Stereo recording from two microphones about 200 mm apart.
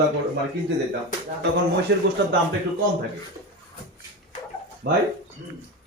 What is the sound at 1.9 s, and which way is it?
Speech, 55° right (ahead or behind).